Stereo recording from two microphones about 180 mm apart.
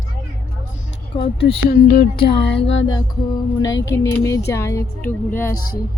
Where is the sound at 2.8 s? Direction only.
25° left (ahead or behind).